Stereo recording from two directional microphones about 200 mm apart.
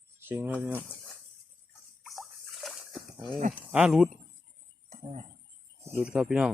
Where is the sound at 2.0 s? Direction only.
Centre (ahead or behind).